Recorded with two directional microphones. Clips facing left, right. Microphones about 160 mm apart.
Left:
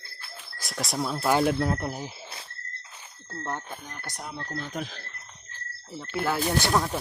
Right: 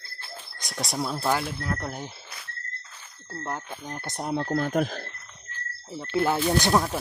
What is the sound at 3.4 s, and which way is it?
Speech, 5° right (ahead or behind).